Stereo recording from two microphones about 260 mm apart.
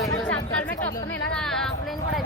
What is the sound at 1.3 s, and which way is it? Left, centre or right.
Speech, centre.